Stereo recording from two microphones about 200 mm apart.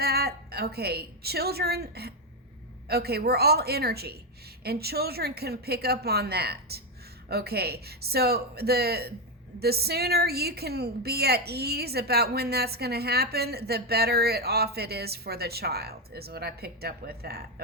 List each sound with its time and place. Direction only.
0.0 s a woman's voice: 50° right (ahead or behind)